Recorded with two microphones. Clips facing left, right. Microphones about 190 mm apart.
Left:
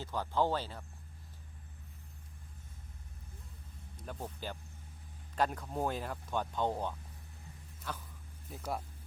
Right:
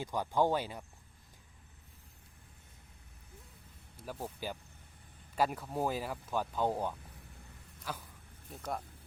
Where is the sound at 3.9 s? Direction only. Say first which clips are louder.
Right 2 dB; 5° right (ahead or behind).